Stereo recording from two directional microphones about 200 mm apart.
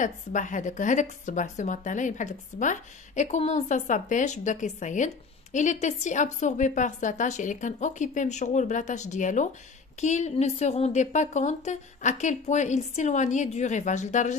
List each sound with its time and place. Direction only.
0.0 s a woman's voice: 40° left (ahead or behind)